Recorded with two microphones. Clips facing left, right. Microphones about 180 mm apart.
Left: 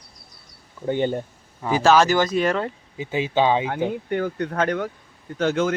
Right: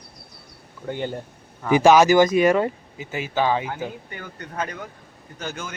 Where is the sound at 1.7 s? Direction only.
15° right (ahead or behind).